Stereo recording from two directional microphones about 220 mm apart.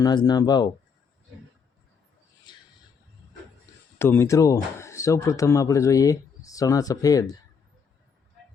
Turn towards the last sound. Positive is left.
turn(degrees=15)  # may be behind; listen again after turning